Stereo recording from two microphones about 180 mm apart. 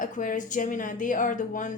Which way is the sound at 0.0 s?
45° left (ahead or behind).